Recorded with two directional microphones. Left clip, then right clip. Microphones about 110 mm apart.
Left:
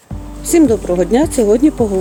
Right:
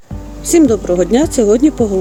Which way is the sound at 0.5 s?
20° right (ahead or behind).